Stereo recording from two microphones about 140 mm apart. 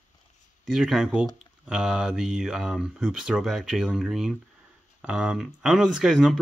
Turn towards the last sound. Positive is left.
turn(degrees=0)  # may be behind; listen again after turning